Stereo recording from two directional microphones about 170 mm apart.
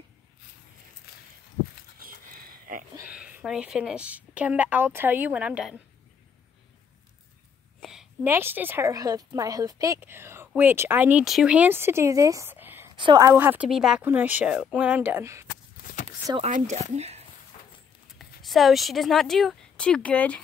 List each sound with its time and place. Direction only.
2.3 s a sound: 60° right (ahead or behind)
3.1 s a woman's voice: 10° right (ahead or behind)
7.8 s a sound: 5° right (ahead or behind)
8.3 s a woman's voice: 15° right (ahead or behind)
12.9 s a woman's voice: 25° right (ahead or behind)
13.3 s a woman's voice: 10° right (ahead or behind)
16.4 s speech: 45° right (ahead or behind)
18.4 s speech: centre (ahead or behind)